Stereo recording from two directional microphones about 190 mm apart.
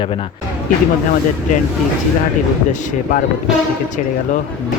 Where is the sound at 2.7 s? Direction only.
45° left (ahead or behind).